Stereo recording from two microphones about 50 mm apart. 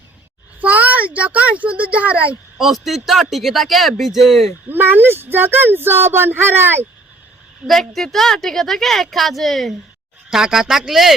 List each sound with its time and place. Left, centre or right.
0.6 s speech: right
2.6 s a woman's voice: centre
4.7 s speech: right
7.7 s a woman's voice: centre
10.2 s speech: centre